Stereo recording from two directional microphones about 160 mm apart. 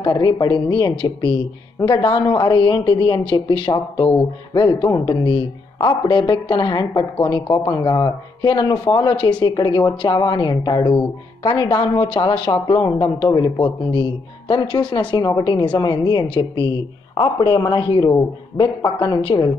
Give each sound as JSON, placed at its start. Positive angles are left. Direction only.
{"t": 0.0, "sound": "a man's voice", "side_deg": 30}